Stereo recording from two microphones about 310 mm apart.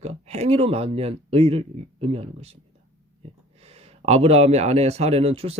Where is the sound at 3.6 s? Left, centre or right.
Centre.